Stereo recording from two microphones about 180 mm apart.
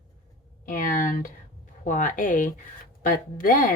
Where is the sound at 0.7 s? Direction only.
50° left (ahead or behind).